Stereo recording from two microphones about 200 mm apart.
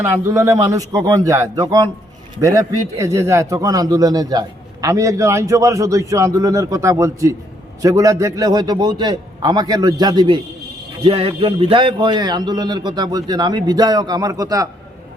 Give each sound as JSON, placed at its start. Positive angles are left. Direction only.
{"t": 0.0, "sound": "a man's voice", "side_deg": -15}